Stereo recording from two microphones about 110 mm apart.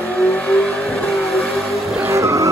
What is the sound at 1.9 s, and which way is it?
Vehicle, 25° right (ahead or behind).